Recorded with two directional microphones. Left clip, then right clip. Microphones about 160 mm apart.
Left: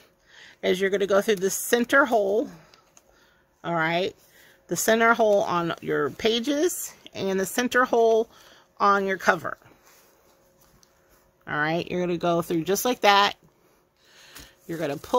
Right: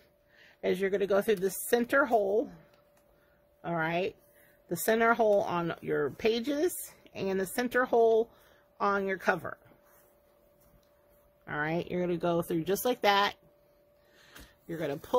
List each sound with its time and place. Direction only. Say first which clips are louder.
0.4 s speech: left 6 dB; 25° left (ahead or behind)
3.6 s speech: left 7 dB; 20° left (ahead or behind)
11.4 s speech: left 7 dB; 25° left (ahead or behind)
14.2 s a sound: left 6 dB; 25° left (ahead or behind)